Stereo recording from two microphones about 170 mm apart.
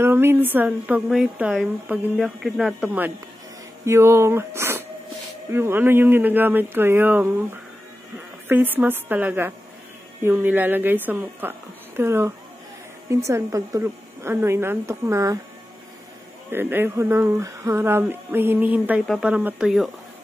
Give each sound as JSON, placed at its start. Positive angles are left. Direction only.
{"t": 0.0, "sound": "speech", "side_deg": -15}
{"t": 8.5, "sound": "speech", "side_deg": -10}
{"t": 16.4, "sound": "speech", "side_deg": -10}